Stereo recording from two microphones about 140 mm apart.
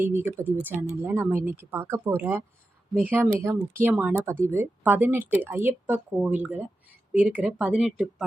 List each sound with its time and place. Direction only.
0.0 s speech: 15° right (ahead or behind)